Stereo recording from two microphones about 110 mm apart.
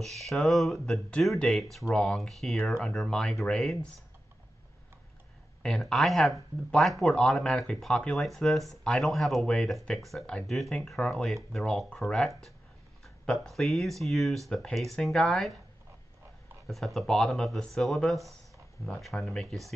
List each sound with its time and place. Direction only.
0.0 s speech: centre (ahead or behind)
5.6 s speech: 5° left (ahead or behind)
16.6 s speech: centre (ahead or behind)